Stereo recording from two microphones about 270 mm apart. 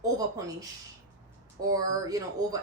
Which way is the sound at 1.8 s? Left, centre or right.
Centre.